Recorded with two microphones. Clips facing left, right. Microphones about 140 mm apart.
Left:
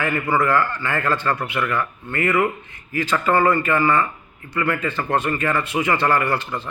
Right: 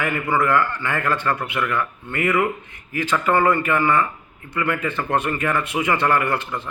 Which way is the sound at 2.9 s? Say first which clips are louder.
Even; 20° right (ahead or behind).